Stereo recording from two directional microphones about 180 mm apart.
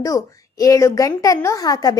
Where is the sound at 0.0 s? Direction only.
20° left (ahead or behind).